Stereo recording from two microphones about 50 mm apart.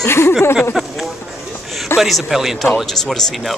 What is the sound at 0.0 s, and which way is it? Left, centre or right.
Speech, left.